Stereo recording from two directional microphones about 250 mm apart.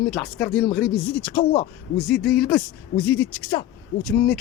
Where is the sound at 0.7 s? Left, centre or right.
Centre.